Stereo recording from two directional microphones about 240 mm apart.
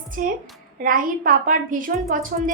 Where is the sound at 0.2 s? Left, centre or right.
Right.